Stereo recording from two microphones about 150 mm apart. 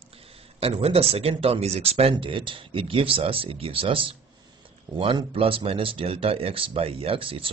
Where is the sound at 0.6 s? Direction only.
40° right (ahead or behind).